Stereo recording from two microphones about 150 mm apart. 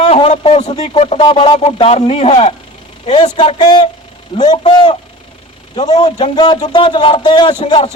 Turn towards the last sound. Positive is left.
turn(degrees=40)  # may be behind; listen again after turning